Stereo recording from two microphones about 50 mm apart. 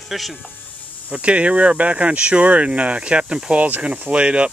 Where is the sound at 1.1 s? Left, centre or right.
Right.